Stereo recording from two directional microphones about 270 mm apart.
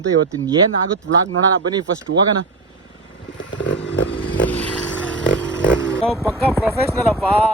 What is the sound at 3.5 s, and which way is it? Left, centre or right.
Motorcycle, left.